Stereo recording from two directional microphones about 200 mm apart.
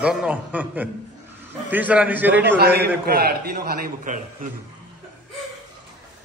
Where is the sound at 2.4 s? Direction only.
50° right (ahead or behind).